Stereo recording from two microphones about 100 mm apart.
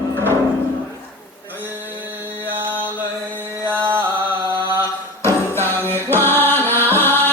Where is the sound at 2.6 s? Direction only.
20° right (ahead or behind).